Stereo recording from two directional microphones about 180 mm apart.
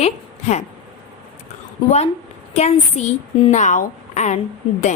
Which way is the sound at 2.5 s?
40° left (ahead or behind).